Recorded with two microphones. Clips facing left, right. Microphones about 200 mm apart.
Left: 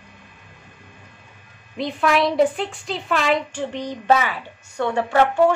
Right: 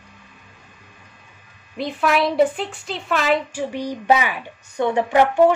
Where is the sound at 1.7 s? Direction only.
Centre (ahead or behind).